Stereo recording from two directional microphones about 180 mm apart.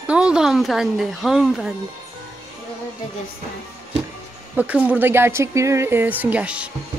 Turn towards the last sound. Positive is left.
turn(degrees=-5)  # may be behind; listen again after turning